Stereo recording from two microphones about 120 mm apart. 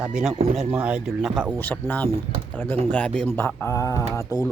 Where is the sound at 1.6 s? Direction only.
15° left (ahead or behind).